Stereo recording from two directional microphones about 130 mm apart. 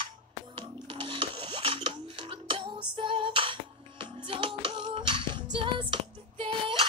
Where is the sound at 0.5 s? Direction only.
40° right (ahead or behind).